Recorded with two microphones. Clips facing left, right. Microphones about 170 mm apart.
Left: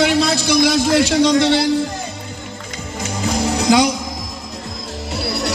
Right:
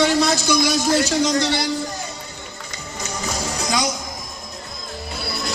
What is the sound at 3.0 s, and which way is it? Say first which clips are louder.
Music: left 7 dB; 60° left (ahead or behind).